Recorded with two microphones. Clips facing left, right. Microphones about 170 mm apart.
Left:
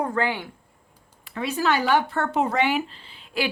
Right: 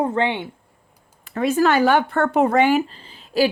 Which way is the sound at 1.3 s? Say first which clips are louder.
Right 7 dB; 50° right (ahead or behind).